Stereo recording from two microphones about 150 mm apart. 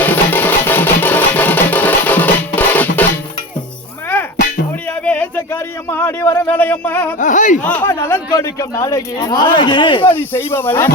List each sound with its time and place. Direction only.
0.0 s music: 10° left (ahead or behind)
4.9 s a sound: 10° left (ahead or behind)
7.2 s speech: 55° left (ahead or behind)
7.6 s speech: 10° left (ahead or behind); by 10.1 s 35° left (ahead or behind)
10.1 s speech: 15° left (ahead or behind)